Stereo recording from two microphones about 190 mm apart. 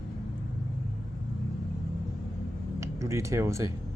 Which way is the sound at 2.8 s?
15° right (ahead or behind).